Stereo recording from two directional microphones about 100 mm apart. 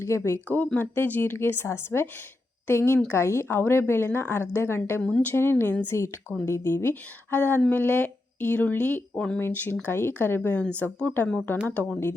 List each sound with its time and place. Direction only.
0.0 s speech: 25° left (ahead or behind)
5.0 s speech: 10° left (ahead or behind)
5.3 s speech: 20° left (ahead or behind)